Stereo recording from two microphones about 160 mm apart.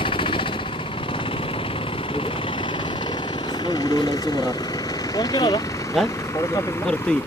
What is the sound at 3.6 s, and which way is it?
Vehicle, 25° left (ahead or behind).